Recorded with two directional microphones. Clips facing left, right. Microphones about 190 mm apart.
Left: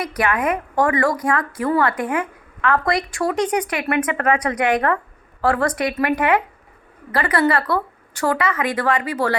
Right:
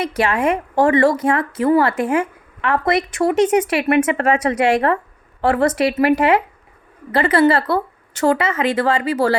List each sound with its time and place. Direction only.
0.0 s a woman's voice: 25° right (ahead or behind)